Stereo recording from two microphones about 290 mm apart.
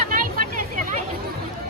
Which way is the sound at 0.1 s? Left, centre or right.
Right.